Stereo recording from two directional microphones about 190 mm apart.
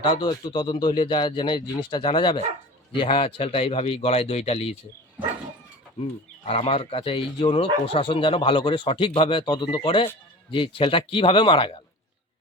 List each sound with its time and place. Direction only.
0.0 s speech: 20° left (ahead or behind)
6.0 s speech: 30° left (ahead or behind)